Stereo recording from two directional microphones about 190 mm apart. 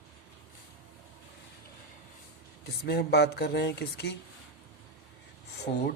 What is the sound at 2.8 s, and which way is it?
Speech, 60° left (ahead or behind).